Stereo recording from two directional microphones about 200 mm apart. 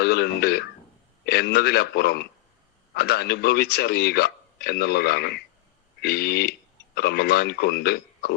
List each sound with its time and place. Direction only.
0.0 s radio: 55° left (ahead or behind)
1.2 s a man's voice: 55° left (ahead or behind)